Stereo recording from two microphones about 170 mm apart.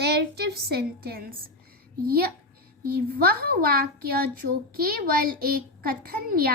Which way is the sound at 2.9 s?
65° right (ahead or behind).